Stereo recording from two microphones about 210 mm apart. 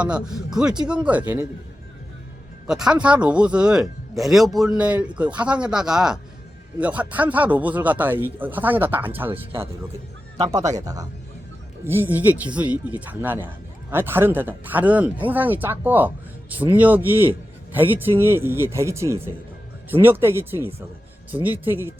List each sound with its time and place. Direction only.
0.0 s speech: 5° right (ahead or behind)
2.6 s speech: 5° right (ahead or behind)
11.9 s speech: 10° right (ahead or behind)